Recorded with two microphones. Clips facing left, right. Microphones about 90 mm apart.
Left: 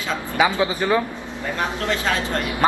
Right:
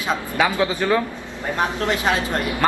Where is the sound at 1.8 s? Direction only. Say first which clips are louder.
Right 1 dB; 20° right (ahead or behind).